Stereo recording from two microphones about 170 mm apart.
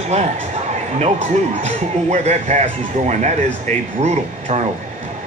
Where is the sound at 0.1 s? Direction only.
40° right (ahead or behind).